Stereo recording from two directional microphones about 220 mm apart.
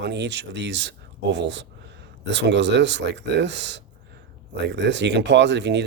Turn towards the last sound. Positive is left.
turn(degrees=-55)  # may be behind; listen again after turning